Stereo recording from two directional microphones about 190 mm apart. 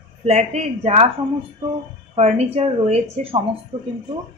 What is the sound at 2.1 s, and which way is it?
A woman's voice, 35° right (ahead or behind).